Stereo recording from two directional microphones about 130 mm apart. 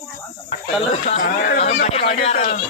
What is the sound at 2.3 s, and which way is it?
Speech, 90° left.